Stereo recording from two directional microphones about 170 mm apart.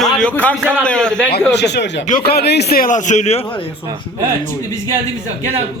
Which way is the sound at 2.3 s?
70° left (ahead or behind).